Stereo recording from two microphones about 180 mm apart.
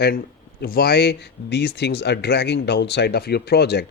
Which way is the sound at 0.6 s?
55° left (ahead or behind).